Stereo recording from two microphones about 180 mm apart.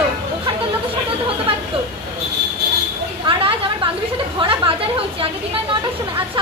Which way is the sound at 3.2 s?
30° right (ahead or behind).